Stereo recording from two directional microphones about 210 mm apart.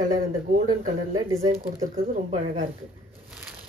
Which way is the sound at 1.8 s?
35° right (ahead or behind).